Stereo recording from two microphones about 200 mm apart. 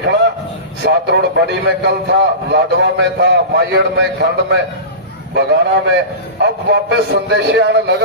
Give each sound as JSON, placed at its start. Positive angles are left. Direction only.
{"t": 0.8, "sound": "a man's voice", "side_deg": -55}